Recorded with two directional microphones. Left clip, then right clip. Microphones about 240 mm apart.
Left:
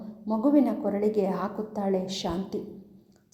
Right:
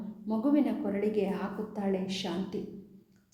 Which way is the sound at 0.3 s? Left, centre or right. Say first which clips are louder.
Left 5 dB; centre.